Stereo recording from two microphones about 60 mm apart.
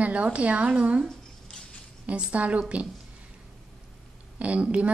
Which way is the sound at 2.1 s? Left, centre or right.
Centre.